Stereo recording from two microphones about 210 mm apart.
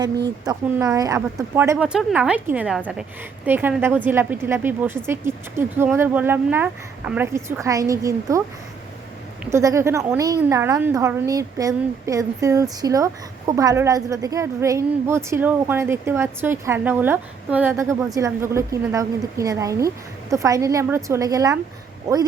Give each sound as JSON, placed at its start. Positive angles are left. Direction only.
{"t": 0.4, "sound": "a woman's voice", "side_deg": -15}
{"t": 9.4, "sound": "a woman's voice", "side_deg": -15}